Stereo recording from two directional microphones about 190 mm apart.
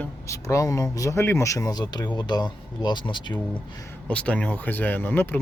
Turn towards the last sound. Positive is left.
turn(degrees=10)  # may be behind; listen again after turning